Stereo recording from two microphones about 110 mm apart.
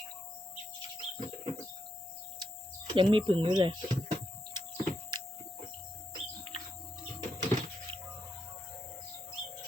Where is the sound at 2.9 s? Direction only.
50° right (ahead or behind).